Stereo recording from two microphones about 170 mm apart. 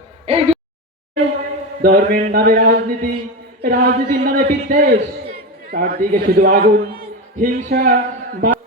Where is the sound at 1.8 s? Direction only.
60° right (ahead or behind).